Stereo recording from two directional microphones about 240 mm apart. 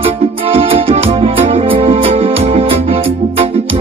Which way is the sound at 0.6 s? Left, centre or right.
Right.